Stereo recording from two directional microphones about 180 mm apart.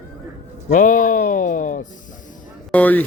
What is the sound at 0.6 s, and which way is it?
A man's voice, 45° left (ahead or behind).